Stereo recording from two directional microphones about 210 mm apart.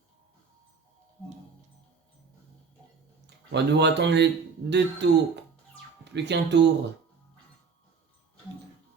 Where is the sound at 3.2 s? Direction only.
55° right (ahead or behind).